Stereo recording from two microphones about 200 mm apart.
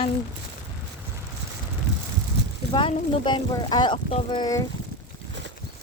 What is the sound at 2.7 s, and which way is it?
Speech, 25° left (ahead or behind).